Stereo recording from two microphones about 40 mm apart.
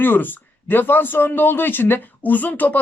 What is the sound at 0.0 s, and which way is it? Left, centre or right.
Speech, left.